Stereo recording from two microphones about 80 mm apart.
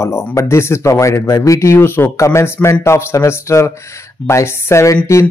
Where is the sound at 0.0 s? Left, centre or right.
Left.